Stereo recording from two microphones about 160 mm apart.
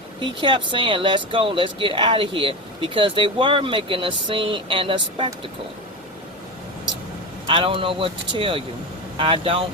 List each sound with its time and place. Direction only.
0.2 s speech: 30° right (ahead or behind)
7.4 s speech: 30° right (ahead or behind)